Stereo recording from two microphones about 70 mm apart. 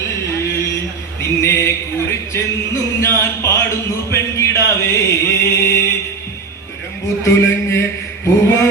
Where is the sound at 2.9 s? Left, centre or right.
Left.